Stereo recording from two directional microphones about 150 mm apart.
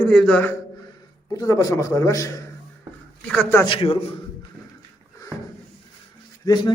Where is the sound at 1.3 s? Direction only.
25° left (ahead or behind).